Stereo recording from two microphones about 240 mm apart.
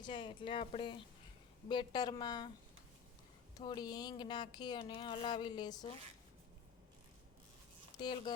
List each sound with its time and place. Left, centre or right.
0.0 s speech: centre
3.6 s speech: centre
7.9 s speech: centre